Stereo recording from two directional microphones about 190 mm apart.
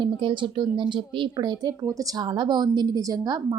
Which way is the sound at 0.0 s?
25° right (ahead or behind).